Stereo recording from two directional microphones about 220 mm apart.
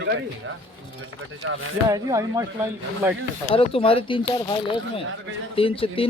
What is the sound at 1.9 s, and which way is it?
Speech, 15° right (ahead or behind).